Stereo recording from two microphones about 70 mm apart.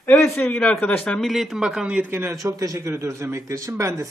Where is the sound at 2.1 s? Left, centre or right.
Right.